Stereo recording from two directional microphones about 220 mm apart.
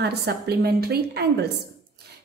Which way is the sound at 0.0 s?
45° right (ahead or behind).